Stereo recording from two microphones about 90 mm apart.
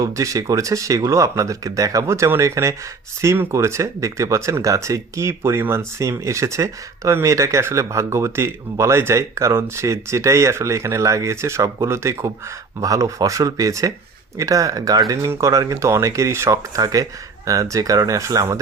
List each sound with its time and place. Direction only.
0.0 s speech: 40° right (ahead or behind)